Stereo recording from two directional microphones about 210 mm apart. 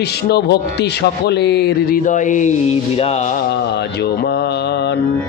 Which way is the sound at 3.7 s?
50° left (ahead or behind).